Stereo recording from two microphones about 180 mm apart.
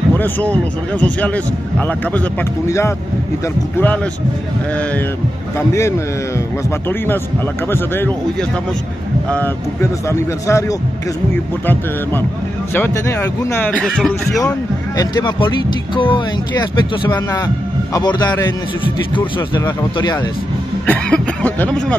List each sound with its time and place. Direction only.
0.1 s a man's voice: 10° left (ahead or behind)
3.7 s a man's voice: 10° left (ahead or behind)
5.7 s a man's voice: 15° left (ahead or behind)
7.7 s a man's voice: 10° left (ahead or behind)
15.0 s speech: 25° left (ahead or behind)
20.8 s a man's voice: 10° left (ahead or behind)